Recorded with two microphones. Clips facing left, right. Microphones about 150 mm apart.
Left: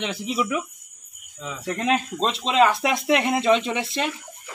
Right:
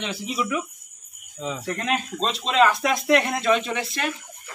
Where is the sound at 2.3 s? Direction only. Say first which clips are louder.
Even; 20° left (ahead or behind).